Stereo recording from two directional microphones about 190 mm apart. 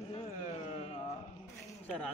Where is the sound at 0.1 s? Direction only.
30° left (ahead or behind).